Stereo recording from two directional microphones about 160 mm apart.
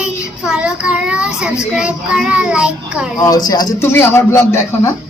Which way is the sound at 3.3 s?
25° left (ahead or behind).